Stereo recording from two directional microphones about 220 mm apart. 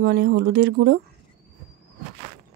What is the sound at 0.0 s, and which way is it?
Speech, 45° right (ahead or behind).